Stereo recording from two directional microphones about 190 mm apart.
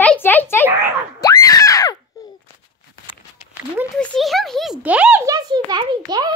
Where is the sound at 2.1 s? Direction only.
20° left (ahead or behind).